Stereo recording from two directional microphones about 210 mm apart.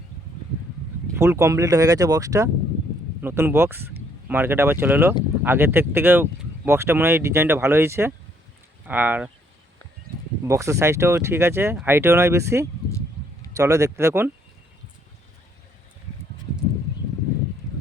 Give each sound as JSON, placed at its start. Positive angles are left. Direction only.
{"t": 1.1, "sound": "speech", "side_deg": -15}
{"t": 10.4, "sound": "speech", "side_deg": -15}